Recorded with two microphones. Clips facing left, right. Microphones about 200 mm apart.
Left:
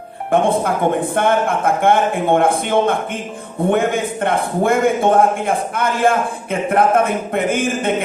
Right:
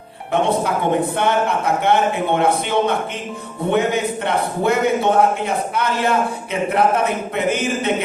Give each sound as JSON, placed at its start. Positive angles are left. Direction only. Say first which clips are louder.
{"t": 0.3, "sound": "a man's voice", "louder": "left 3 dB", "side_deg": 50}